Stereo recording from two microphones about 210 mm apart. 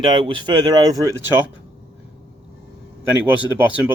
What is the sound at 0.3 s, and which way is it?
Speech, 20° right (ahead or behind).